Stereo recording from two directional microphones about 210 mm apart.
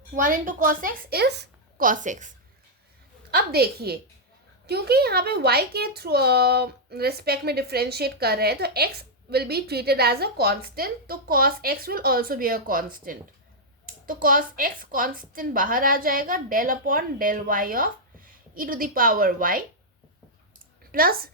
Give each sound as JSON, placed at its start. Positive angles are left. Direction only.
{"t": 0.2, "sound": "a woman's voice", "side_deg": -40}
{"t": 3.3, "sound": "a child's voice", "side_deg": -50}
{"t": 20.9, "sound": "a child's voice", "side_deg": -45}